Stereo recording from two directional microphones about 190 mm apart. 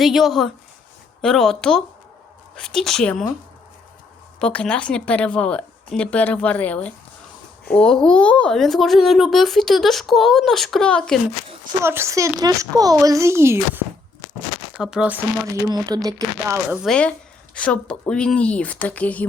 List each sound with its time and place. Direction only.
0.0 s speech: centre (ahead or behind)
4.4 s a woman's voice: 5° left (ahead or behind)
11.8 s speech: 15° right (ahead or behind)
15.6 s speech: 20° right (ahead or behind)
16.6 s a woman's voice: centre (ahead or behind)